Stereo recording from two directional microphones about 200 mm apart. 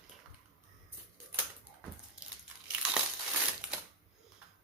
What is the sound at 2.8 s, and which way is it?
Crumpling, 5° right (ahead or behind).